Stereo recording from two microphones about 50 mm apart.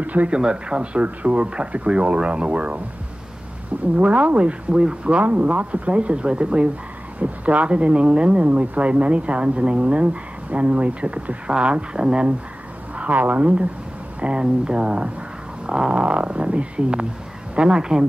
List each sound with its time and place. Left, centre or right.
0.0 s speech: right
0.4 s speech: centre
3.9 s speech: right
12.9 s speech: right; by 18.0 s centre